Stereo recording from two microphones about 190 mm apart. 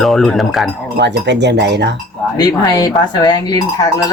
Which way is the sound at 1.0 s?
65° right (ahead or behind).